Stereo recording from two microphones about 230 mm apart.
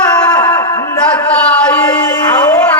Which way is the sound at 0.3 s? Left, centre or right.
Centre.